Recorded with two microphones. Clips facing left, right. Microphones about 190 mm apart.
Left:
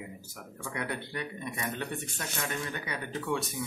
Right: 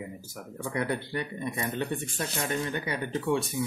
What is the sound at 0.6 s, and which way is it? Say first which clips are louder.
A man's voice: right 6 dB; 35° right (ahead or behind).